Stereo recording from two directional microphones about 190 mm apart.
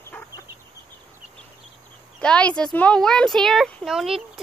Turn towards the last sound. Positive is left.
turn(degrees=-5)  # may be behind; listen again after turning